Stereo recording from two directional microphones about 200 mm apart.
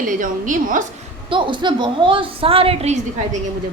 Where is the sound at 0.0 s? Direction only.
40° right (ahead or behind).